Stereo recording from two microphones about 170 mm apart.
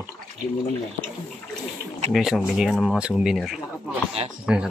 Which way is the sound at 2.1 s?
Centre (ahead or behind).